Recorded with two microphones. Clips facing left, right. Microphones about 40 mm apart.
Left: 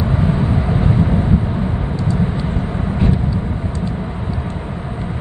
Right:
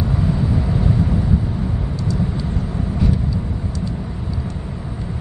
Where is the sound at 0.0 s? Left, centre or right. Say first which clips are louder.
Left 3 dB; left.